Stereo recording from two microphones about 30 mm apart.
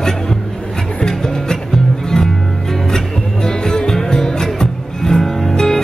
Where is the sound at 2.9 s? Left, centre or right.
Left.